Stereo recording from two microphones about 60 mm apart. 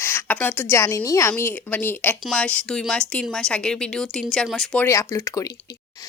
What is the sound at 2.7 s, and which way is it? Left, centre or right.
A woman's voice, centre.